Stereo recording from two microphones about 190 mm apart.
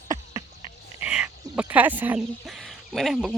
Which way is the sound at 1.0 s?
5° right (ahead or behind).